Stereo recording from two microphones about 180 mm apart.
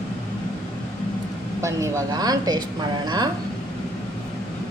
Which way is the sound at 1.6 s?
15° right (ahead or behind).